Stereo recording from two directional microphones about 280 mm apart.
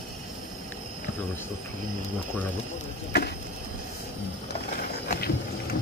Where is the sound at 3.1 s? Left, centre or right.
Left.